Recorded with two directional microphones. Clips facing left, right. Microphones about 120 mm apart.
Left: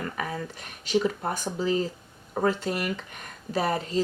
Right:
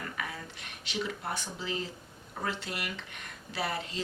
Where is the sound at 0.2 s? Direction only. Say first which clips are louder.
Left 7 dB; 40° left (ahead or behind).